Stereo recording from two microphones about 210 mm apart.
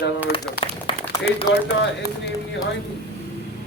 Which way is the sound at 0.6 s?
25° left (ahead or behind).